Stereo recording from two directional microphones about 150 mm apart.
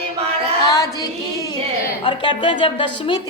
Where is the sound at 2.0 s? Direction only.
30° left (ahead or behind).